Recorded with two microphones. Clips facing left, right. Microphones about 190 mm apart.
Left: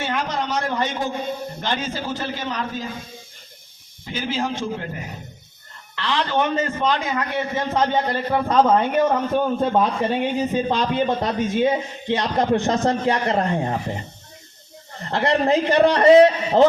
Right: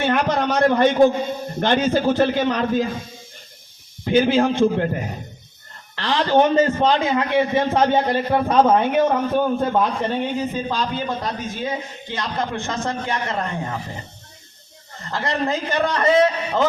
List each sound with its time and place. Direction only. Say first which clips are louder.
0.0 s a man's voice: right 6 dB; 60° right (ahead or behind)
4.0 s a man's voice: right 9 dB; 60° right (ahead or behind)
6.0 s a man's voice: right 5 dB; 35° right (ahead or behind); by 10.2 s 10° left (ahead or behind)
10.7 s a man's voice: left 4 dB; 25° left (ahead or behind)
15.1 s a man's voice: left 5 dB; 30° left (ahead or behind)